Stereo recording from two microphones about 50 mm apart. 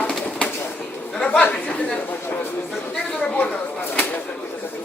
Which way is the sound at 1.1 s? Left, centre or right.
Centre.